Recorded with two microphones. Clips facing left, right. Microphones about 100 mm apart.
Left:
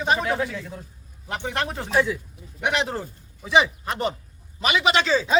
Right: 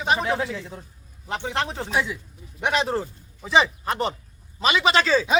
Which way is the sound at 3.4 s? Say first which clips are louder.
Even; 30° right (ahead or behind).